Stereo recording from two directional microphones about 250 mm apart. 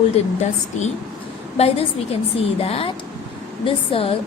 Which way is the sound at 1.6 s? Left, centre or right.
Left.